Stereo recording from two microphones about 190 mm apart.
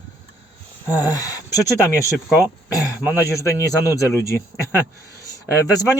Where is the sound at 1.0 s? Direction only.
20° left (ahead or behind).